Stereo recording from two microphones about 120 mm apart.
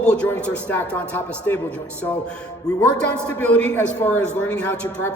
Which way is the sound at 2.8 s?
10° left (ahead or behind).